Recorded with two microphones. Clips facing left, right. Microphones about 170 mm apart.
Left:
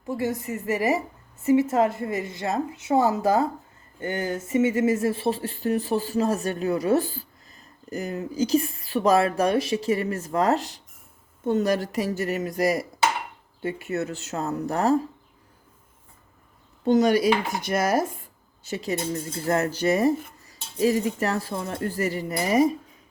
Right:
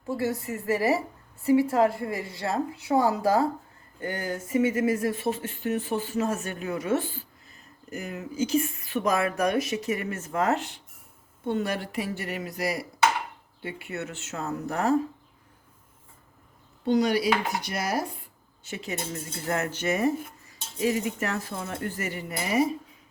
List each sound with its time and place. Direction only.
0.1 s a woman's voice: 20° left (ahead or behind); by 15.0 s 35° left (ahead or behind)
16.8 s speech: 45° left (ahead or behind)